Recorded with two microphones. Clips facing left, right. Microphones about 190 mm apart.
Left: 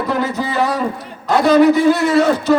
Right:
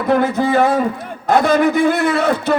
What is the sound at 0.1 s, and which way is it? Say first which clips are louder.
A man's voice: right 9 dB; 55° right (ahead or behind).